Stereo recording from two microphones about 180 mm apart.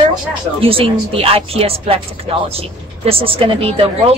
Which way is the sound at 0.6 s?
30° right (ahead or behind).